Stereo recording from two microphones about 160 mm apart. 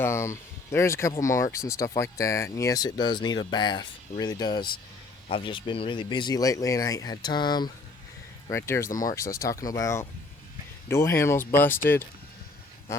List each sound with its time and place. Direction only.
0.0 s speech: 15° left (ahead or behind)
8.4 s speech: 15° left (ahead or behind)
8.9 s speech: 55° left (ahead or behind)
9.1 s speech: 20° left (ahead or behind)